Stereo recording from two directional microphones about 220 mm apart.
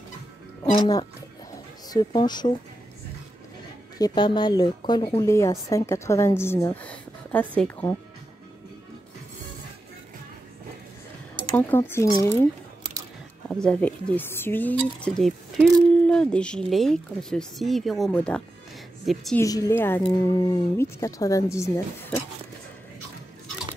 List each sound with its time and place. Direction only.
0.7 s speech: 20° left (ahead or behind)
4.0 s a woman's voice: 20° left (ahead or behind)
11.5 s a woman's voice: 10° left (ahead or behind)
13.5 s speech: 5° left (ahead or behind)
19.4 s a woman's voice: 15° left (ahead or behind)